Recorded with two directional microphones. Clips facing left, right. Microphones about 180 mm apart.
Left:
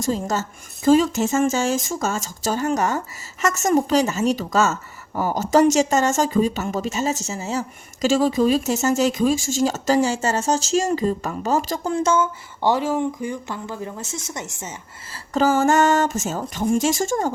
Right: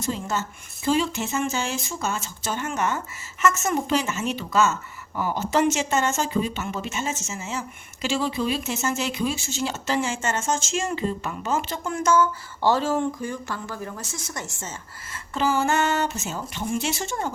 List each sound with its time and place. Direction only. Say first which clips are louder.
0.0 s speech: left 5 dB; 40° left (ahead or behind); by 14.7 s 20° left (ahead or behind)
15.3 s speech: left 5 dB; 40° left (ahead or behind)